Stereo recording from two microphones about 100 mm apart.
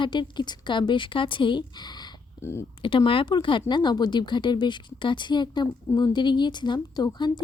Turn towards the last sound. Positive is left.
turn(degrees=45)  # may be behind; listen again after turning